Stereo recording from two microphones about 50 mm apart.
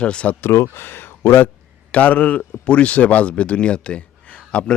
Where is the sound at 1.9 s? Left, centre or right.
Left.